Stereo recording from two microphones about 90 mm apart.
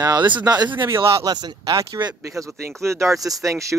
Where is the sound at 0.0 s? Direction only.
50° right (ahead or behind).